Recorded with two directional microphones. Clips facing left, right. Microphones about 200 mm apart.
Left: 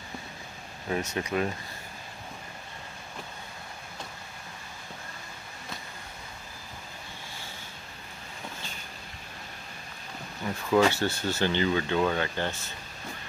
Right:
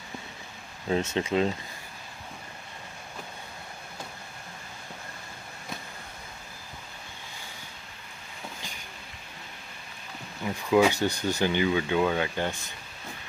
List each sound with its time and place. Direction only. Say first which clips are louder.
0.8 s speech: right 4 dB; 25° right (ahead or behind)
10.4 s speech: right 1 dB; 10° right (ahead or behind)